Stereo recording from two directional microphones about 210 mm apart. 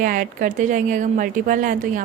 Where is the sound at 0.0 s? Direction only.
40° right (ahead or behind).